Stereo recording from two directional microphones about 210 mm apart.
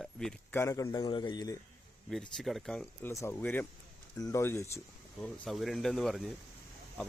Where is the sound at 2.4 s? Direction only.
Centre (ahead or behind).